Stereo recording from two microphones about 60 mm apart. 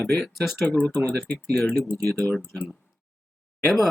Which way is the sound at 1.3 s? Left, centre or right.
Left.